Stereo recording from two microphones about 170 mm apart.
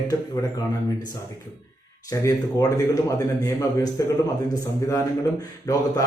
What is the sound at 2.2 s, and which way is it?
A man's voice, 20° left (ahead or behind).